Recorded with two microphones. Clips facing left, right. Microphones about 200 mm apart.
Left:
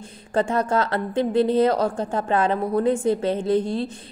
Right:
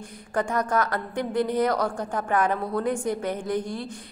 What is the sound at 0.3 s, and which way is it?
A woman's voice, 25° left (ahead or behind).